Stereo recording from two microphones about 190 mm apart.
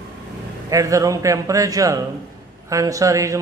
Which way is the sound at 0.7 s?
15° right (ahead or behind).